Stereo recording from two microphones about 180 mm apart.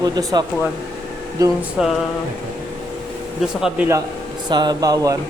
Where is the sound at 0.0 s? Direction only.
20° right (ahead or behind).